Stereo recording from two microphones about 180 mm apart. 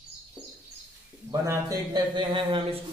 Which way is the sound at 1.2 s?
15° right (ahead or behind).